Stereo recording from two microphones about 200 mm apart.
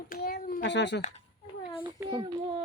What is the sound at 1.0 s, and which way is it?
Speech, 35° left (ahead or behind).